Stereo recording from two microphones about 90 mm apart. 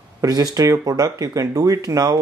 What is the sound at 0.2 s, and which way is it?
Speech, 45° right (ahead or behind).